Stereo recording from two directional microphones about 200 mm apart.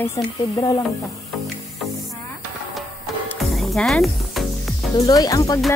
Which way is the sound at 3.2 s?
Centre (ahead or behind).